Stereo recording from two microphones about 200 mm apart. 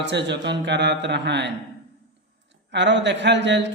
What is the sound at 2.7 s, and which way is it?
Mantra, 60° right (ahead or behind).